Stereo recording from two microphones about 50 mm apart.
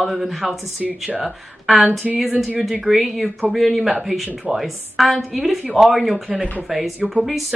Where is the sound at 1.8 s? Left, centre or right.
Right.